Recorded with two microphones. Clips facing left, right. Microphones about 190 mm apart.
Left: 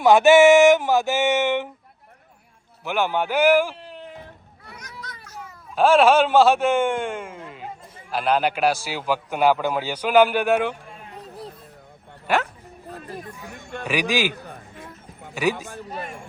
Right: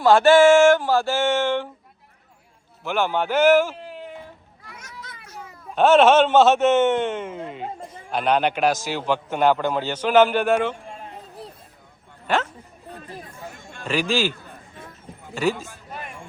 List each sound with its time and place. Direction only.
0.0 s a man's voice: 20° left (ahead or behind)
2.8 s a man's voice: 15° left (ahead or behind)
4.8 s children playing: 30° right (ahead or behind)
5.7 s a man's voice: 5° left (ahead or behind)
13.8 s a man's voice: 15° left (ahead or behind)